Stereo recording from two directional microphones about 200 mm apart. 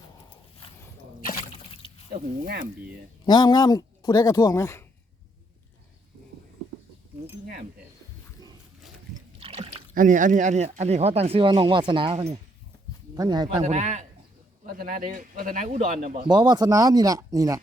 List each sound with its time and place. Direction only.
1.7 s a sound: 25° left (ahead or behind)
3.2 s speech: 20° left (ahead or behind)
9.4 s speech: 30° right (ahead or behind)
13.6 s a man's voice: 35° right (ahead or behind)
14.6 s a man's voice: 45° right (ahead or behind)
16.3 s speech: 20° right (ahead or behind)